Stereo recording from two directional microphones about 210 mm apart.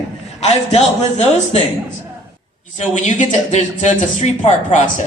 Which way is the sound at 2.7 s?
35° left (ahead or behind).